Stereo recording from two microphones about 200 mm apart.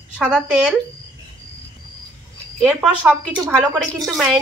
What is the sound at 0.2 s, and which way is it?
Speech, 5° right (ahead or behind).